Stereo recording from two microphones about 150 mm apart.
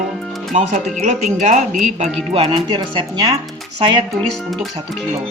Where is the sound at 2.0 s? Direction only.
40° right (ahead or behind).